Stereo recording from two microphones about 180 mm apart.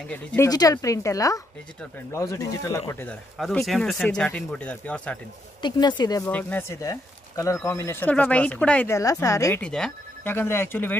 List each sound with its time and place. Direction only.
0.1 s speech: 5° left (ahead or behind)
0.5 s a woman's voice: 20° left (ahead or behind)
3.3 s speech: centre (ahead or behind)
5.6 s a woman's voice: 25° left (ahead or behind)
9.6 s speech: 5° left (ahead or behind)